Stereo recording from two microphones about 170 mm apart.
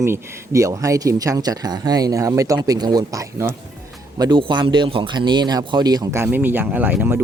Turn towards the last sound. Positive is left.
turn(degrees=-10)  # may be behind; listen again after turning